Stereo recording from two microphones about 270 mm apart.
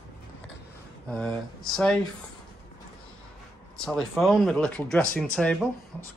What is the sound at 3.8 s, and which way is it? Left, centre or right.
Speech, centre.